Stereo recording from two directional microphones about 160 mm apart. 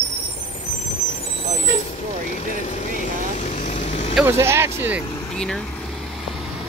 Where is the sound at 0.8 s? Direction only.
40° left (ahead or behind).